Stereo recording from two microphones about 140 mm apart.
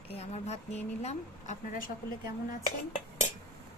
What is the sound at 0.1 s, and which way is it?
A woman's voice, 45° left (ahead or behind).